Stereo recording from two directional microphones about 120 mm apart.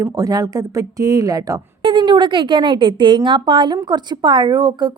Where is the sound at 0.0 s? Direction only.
30° right (ahead or behind).